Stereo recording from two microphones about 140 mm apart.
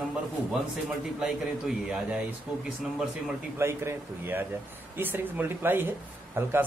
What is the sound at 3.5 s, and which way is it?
Speech, 20° right (ahead or behind).